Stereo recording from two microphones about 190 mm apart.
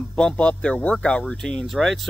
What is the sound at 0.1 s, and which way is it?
Speech, 5° left (ahead or behind).